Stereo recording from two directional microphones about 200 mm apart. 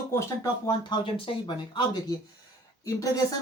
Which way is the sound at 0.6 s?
25° left (ahead or behind).